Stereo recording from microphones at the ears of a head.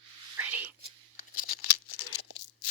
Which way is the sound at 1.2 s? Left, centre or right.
Left.